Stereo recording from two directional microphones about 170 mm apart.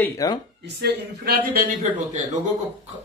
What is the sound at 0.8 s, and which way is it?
Speech, 70° right (ahead or behind).